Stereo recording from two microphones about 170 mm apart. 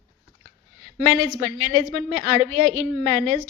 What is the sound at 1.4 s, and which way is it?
A woman's voice, 10° right (ahead or behind).